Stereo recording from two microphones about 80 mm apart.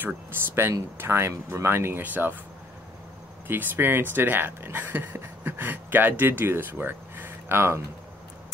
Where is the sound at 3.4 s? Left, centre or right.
Right.